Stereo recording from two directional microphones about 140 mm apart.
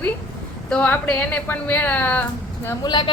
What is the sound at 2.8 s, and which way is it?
Speech, 30° left (ahead or behind).